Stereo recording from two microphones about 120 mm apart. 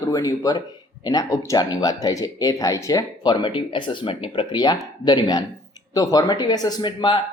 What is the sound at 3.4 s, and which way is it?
Speech, 45° left (ahead or behind).